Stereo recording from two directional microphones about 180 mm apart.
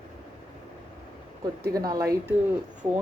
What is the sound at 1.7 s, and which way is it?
Speech, 20° right (ahead or behind).